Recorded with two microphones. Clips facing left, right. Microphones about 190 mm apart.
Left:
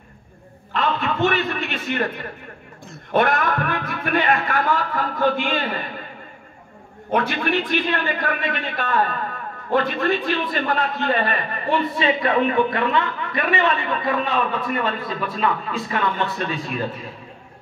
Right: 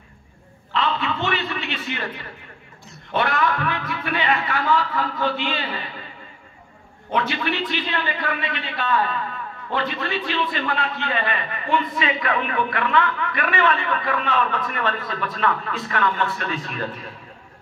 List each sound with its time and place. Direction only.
0.7 s a man's voice: 50° left (ahead or behind)
7.1 s a man's voice: 50° left (ahead or behind); by 16.8 s 20° left (ahead or behind)